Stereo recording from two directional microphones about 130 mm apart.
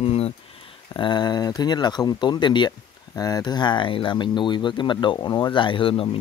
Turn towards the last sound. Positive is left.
turn(degrees=45)  # may be behind; listen again after turning